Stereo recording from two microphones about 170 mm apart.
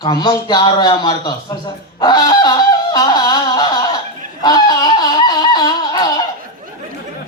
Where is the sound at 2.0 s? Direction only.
25° left (ahead or behind).